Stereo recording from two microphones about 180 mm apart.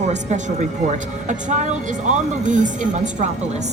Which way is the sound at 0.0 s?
40° right (ahead or behind).